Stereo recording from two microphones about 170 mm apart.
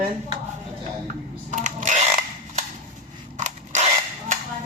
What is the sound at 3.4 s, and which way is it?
Mechanisms, 45° right (ahead or behind).